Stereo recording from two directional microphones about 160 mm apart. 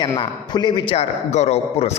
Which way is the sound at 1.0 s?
40° left (ahead or behind).